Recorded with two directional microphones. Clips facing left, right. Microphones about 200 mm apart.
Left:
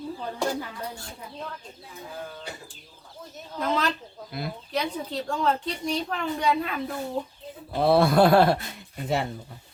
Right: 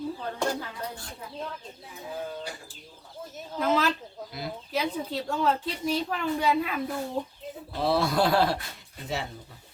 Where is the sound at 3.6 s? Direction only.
5° right (ahead or behind).